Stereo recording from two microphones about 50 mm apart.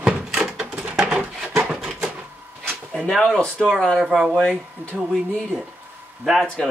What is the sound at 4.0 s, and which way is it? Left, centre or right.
Speech, centre.